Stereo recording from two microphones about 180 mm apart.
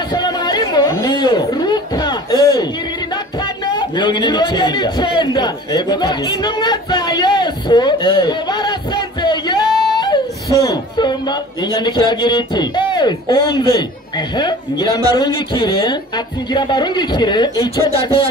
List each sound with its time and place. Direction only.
0.1 s chatter: 25° left (ahead or behind)
0.9 s a sound: 20° left (ahead or behind)
3.9 s a man's voice: 25° left (ahead or behind)
9.7 s singing: centre (ahead or behind)
9.9 s speech: 20° left (ahead or behind)